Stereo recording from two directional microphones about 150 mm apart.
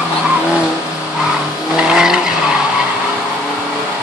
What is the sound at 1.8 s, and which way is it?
Vehicle, 5° right (ahead or behind).